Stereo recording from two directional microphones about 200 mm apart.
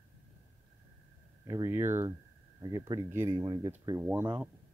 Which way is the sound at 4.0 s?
10° right (ahead or behind).